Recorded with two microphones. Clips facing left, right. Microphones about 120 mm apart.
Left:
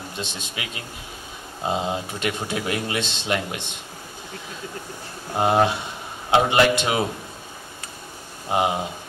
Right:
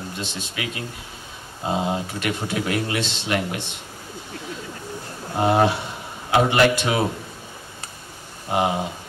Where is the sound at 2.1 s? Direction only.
20° left (ahead or behind).